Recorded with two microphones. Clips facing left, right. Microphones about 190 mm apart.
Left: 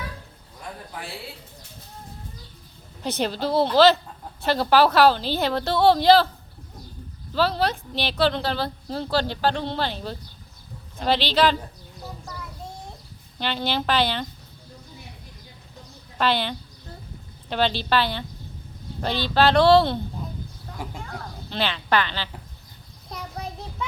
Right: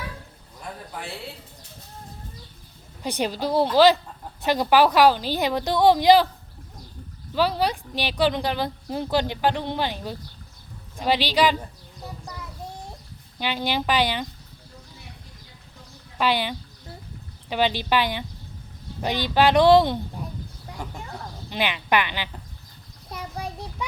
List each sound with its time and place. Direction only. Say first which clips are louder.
3.0 s speech: even; 10° right (ahead or behind)
7.3 s a child's voice: even; 10° right (ahead or behind)
16.1 s speech: even; 10° right (ahead or behind)
20.8 s speech: left 1 dB; 5° left (ahead or behind)
21.5 s speech: even; 15° right (ahead or behind)
23.0 s a sound: right 1 dB; 5° right (ahead or behind)